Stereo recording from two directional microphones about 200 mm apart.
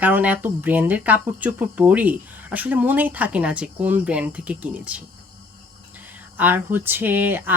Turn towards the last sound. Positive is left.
turn(degrees=-10)  # may be behind; listen again after turning